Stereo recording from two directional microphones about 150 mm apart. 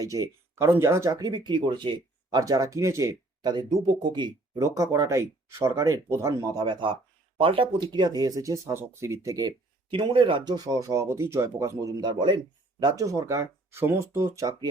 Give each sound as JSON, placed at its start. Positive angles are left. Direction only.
{"t": 0.0, "sound": "speech", "side_deg": -20}
{"t": 11.9, "sound": "speech", "side_deg": -30}